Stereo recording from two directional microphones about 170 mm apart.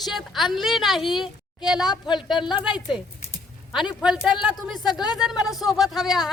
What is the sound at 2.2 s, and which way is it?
Speech, centre (ahead or behind).